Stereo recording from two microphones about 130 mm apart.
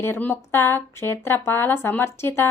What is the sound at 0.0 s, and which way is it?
Speech, 15° left (ahead or behind).